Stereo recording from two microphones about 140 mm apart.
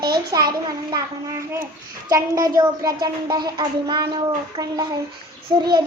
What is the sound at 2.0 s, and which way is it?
A child's voice, 25° right (ahead or behind).